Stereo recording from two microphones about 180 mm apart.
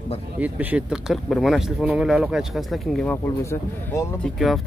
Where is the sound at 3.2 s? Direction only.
15° left (ahead or behind).